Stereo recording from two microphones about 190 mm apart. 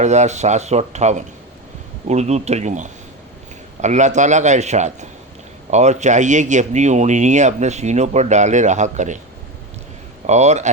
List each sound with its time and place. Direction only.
0.0 s speech: 40° right (ahead or behind)
10.2 s speech: 35° right (ahead or behind)